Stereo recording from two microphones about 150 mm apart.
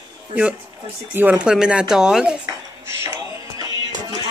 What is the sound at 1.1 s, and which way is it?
Speech, 10° right (ahead or behind).